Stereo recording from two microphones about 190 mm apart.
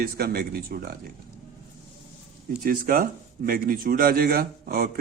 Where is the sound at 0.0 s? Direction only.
55° right (ahead or behind).